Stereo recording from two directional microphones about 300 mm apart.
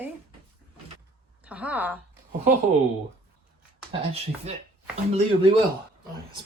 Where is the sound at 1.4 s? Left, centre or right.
Centre.